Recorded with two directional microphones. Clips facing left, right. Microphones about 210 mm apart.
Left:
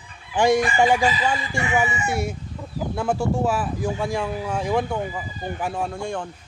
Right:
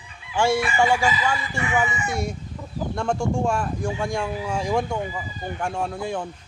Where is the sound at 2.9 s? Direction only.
5° left (ahead or behind).